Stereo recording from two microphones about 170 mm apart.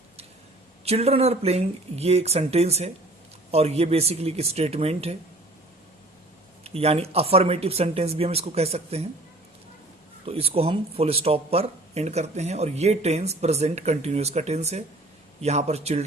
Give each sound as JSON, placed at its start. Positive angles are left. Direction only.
{"t": 0.9, "sound": "speech", "side_deg": -35}
{"t": 6.7, "sound": "speech", "side_deg": -35}
{"t": 10.2, "sound": "speech", "side_deg": -35}